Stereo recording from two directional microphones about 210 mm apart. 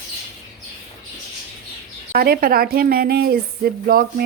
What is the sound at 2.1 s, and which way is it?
Speech, 45° right (ahead or behind).